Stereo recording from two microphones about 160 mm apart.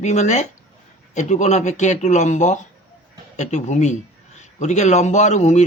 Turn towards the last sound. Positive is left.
turn(degrees=45)  # may be behind; listen again after turning